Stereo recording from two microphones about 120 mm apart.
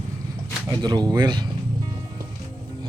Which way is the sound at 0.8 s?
35° right (ahead or behind).